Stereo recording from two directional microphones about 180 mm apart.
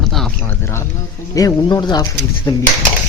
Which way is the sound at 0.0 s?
Centre (ahead or behind).